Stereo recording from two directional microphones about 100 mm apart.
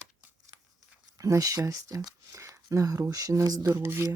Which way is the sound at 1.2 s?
35° right (ahead or behind).